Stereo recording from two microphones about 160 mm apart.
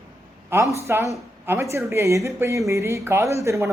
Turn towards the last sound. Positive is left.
turn(degrees=-20)  # may be behind; listen again after turning